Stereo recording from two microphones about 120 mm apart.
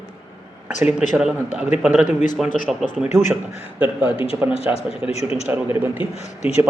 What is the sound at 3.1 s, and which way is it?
Speech, 85° left.